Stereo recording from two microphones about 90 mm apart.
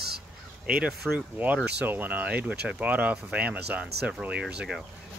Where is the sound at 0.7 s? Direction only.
15° right (ahead or behind).